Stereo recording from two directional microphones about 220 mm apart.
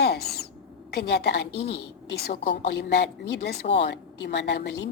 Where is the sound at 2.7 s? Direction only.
50° left (ahead or behind).